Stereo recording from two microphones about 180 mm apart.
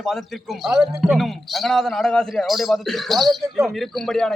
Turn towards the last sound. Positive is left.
turn(degrees=0)  # may be behind; listen again after turning